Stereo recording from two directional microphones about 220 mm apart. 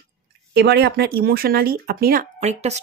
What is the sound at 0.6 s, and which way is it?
Speech, 50° right (ahead or behind).